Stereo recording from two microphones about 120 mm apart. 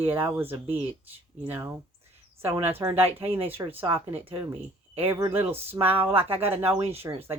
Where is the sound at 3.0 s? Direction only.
15° right (ahead or behind).